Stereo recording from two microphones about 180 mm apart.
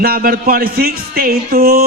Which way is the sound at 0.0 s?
55° right (ahead or behind).